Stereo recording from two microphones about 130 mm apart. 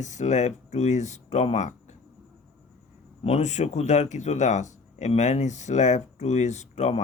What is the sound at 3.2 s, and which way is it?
Speech, 60° left (ahead or behind).